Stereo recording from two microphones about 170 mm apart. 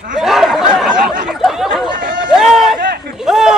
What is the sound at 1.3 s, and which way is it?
Chatter, 5° right (ahead or behind).